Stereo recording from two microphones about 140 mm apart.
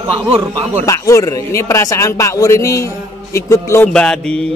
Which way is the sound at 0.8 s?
20° left (ahead or behind).